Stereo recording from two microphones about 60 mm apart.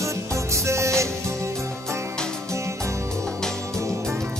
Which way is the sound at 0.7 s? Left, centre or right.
Right.